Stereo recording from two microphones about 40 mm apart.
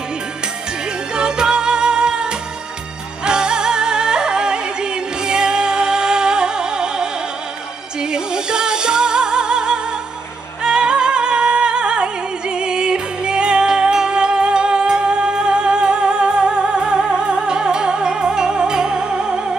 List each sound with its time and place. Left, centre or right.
1.1 s music: centre